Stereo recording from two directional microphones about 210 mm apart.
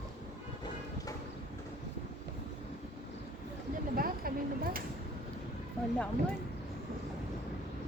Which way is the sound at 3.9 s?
45° right (ahead or behind).